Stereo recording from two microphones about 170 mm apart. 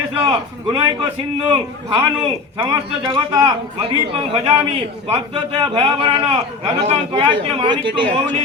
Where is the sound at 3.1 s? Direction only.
30° right (ahead or behind).